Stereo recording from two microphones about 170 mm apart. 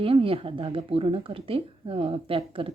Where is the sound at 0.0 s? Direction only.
30° right (ahead or behind).